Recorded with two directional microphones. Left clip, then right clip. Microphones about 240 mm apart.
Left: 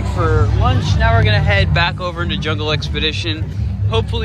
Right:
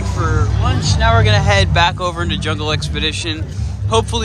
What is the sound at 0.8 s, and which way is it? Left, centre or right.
Speech, centre.